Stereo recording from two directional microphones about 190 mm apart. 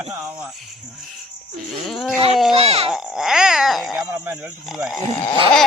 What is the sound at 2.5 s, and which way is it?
Speech, 30° right (ahead or behind).